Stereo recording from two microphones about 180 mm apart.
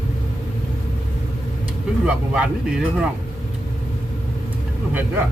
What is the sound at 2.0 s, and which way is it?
Speech, 5° right (ahead or behind).